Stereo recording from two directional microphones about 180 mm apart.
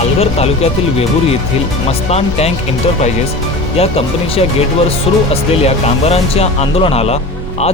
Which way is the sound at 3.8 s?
35° left (ahead or behind).